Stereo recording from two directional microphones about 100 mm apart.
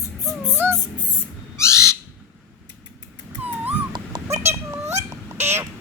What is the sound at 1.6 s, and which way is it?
Bird, 30° left (ahead or behind).